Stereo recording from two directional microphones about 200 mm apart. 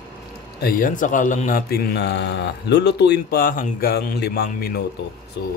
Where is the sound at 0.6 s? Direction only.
45° left (ahead or behind).